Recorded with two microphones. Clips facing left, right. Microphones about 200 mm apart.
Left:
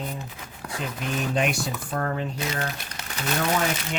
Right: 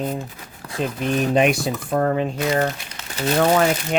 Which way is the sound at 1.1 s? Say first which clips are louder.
Right 7 dB; 70° right (ahead or behind).